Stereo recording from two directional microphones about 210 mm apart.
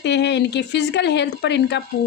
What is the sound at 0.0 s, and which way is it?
A woman's voice, 55° left (ahead or behind).